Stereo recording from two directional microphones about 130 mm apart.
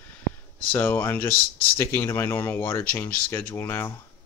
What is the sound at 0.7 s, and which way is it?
Speech, 15° left (ahead or behind).